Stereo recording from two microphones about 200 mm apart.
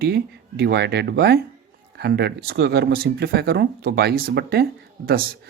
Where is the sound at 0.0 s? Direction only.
50° right (ahead or behind).